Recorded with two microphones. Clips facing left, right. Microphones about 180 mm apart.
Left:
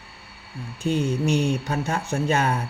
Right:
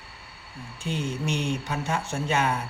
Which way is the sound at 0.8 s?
40° left (ahead or behind).